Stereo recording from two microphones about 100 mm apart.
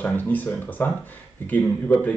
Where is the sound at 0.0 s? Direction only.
15° left (ahead or behind).